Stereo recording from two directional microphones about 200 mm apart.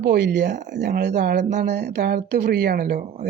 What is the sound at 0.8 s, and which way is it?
Speech, 55° right (ahead or behind).